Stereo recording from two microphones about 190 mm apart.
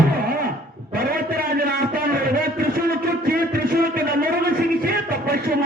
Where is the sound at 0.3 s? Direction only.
50° right (ahead or behind).